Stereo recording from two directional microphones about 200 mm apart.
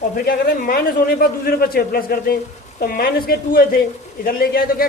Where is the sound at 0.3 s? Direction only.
45° left (ahead or behind).